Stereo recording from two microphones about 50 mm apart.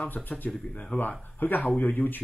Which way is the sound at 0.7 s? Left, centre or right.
Left.